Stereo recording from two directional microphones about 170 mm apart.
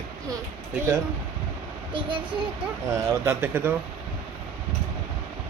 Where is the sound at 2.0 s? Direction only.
30° right (ahead or behind).